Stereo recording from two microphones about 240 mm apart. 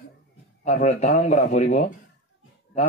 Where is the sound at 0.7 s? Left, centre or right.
Left.